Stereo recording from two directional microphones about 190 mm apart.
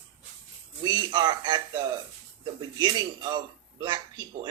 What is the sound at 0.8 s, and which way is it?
Speech, 25° right (ahead or behind).